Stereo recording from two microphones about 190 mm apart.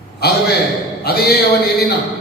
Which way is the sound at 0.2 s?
60° left (ahead or behind).